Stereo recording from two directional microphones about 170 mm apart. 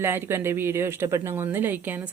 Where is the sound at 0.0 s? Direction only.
15° right (ahead or behind).